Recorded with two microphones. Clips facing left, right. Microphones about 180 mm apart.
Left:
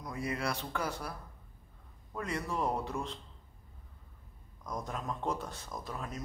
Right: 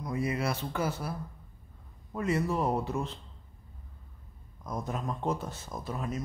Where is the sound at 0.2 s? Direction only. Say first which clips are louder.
Right 3 dB; 5° right (ahead or behind).